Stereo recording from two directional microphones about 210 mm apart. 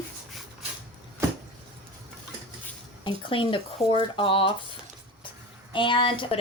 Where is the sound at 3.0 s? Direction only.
25° left (ahead or behind).